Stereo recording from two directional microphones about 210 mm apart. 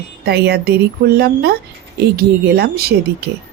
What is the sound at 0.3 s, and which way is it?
A woman's voice, 50° right (ahead or behind).